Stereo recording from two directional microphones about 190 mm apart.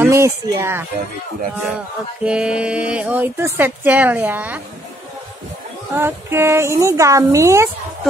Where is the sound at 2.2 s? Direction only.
5° right (ahead or behind).